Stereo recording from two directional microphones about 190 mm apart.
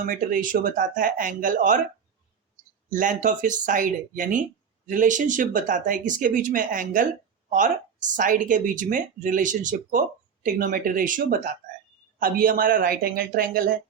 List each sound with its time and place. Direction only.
0.0 s speech: 45° right (ahead or behind)
2.9 s speech: 45° right (ahead or behind)